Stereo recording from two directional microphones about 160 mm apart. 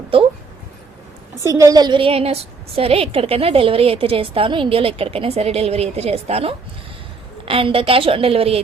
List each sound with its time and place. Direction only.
1.5 s a woman's voice: 20° right (ahead or behind); by 8.6 s 35° right (ahead or behind)